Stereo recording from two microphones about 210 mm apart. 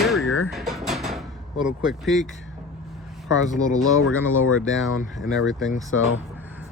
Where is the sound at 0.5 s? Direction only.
Centre (ahead or behind).